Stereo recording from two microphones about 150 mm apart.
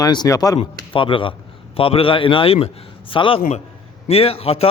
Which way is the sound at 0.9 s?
35° left (ahead or behind).